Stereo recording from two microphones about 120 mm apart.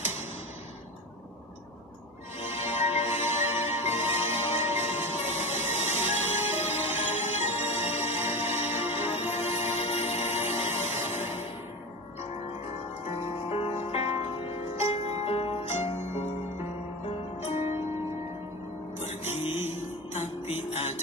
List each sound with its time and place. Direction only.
2.6 s music: 65° left (ahead or behind)
13.0 s music: 55° left (ahead or behind)
19.0 s music: 65° left (ahead or behind)
19.4 s music: 20° right (ahead or behind)
20.1 s music: 65° left (ahead or behind)